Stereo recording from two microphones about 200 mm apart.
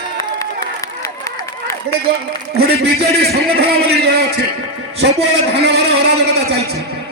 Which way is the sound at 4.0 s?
55° right (ahead or behind).